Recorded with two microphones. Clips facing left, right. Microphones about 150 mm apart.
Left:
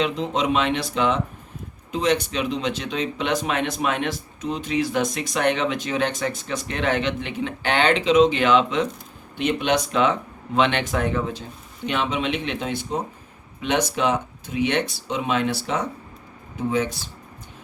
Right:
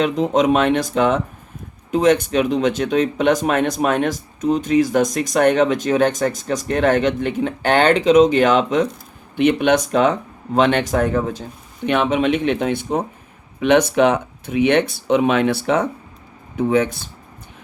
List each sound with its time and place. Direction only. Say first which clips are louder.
0.0 s speech: right 6 dB; 45° right (ahead or behind)
9.4 s speech: right 6 dB; 55° right (ahead or behind)
11.9 s speech: right 7 dB; 55° right (ahead or behind)